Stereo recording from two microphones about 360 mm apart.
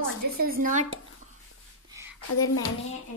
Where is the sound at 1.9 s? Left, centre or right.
Centre.